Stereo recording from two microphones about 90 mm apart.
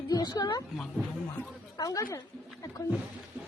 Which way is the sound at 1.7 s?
45° left (ahead or behind).